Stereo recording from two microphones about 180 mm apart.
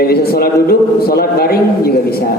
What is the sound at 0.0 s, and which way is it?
A woman's voice, 60° left (ahead or behind).